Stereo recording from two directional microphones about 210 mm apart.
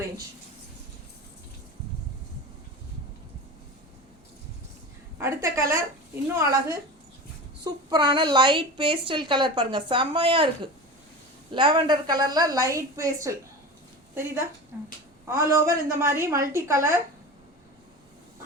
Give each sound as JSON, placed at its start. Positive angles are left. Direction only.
{"t": 5.1, "sound": "a woman's voice", "side_deg": -15}
{"t": 14.7, "sound": "speech", "side_deg": -10}